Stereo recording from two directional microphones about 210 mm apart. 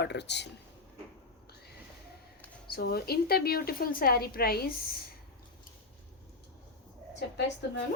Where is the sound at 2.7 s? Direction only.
50° left (ahead or behind).